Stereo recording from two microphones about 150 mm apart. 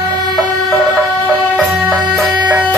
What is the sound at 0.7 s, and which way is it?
Music, 5° left (ahead or behind).